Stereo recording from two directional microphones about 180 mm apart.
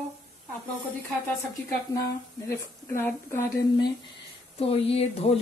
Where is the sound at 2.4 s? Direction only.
15° left (ahead or behind).